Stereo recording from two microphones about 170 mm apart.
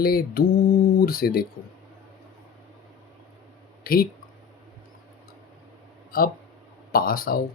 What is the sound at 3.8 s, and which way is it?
Speech, 60° left (ahead or behind).